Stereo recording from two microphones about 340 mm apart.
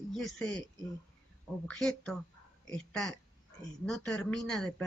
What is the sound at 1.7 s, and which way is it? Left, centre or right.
Speech, centre.